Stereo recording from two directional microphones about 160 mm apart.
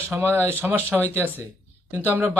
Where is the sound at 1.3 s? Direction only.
15° right (ahead or behind).